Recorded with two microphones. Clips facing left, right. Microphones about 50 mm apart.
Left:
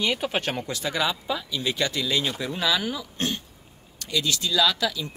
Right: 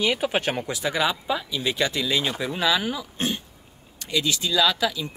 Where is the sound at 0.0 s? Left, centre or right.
Centre.